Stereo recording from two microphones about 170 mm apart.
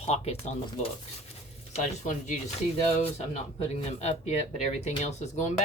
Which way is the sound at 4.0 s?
40° left (ahead or behind).